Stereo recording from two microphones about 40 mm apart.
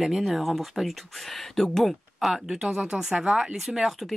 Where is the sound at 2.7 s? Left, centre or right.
Right.